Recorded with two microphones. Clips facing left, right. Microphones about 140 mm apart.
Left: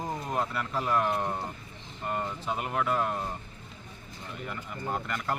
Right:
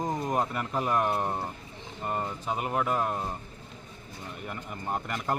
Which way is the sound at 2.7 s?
10° right (ahead or behind).